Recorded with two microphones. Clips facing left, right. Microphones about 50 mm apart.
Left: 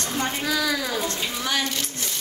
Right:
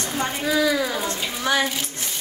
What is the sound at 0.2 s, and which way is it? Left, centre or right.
A man's voice, centre.